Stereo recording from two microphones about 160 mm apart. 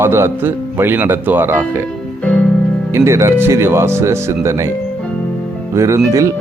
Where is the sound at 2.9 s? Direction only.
15° right (ahead or behind).